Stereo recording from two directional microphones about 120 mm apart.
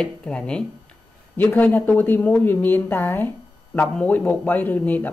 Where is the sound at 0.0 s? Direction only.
5° left (ahead or behind).